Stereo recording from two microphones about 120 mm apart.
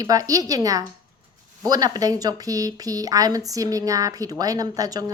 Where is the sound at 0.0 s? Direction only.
30° right (ahead or behind).